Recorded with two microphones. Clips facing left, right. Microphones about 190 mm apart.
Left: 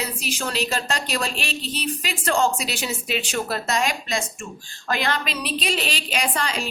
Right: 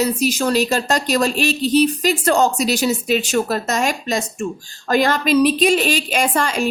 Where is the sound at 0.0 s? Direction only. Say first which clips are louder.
Right 10 dB; 40° right (ahead or behind).